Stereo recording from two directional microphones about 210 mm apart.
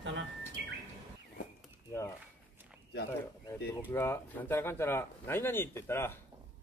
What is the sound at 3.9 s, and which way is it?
Speech, 10° left (ahead or behind).